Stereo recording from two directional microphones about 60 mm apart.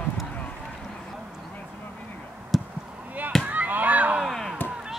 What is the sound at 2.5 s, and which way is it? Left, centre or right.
Chop, centre.